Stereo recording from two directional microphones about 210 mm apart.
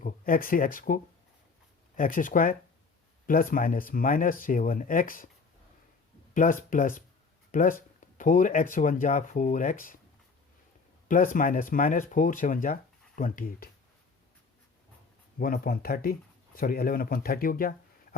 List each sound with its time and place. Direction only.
0.0 s speech: 40° left (ahead or behind)
2.0 s speech: 40° left (ahead or behind)
6.3 s speech: 40° left (ahead or behind)
11.1 s speech: 40° left (ahead or behind)
15.4 s speech: 45° left (ahead or behind)